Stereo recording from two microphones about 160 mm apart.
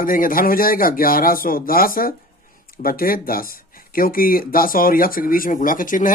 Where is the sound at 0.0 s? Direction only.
60° left (ahead or behind).